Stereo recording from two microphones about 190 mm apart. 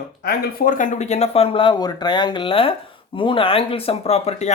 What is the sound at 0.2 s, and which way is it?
Speech, 50° left (ahead or behind).